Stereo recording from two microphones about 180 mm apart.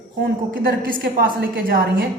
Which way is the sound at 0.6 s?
55° right (ahead or behind).